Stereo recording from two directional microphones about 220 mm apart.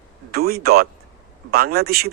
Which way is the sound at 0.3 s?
45° right (ahead or behind).